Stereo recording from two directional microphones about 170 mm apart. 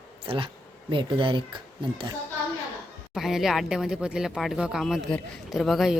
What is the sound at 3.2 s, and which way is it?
Speech, centre (ahead or behind).